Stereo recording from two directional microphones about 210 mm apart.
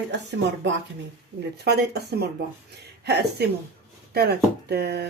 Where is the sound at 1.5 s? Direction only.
50° right (ahead or behind).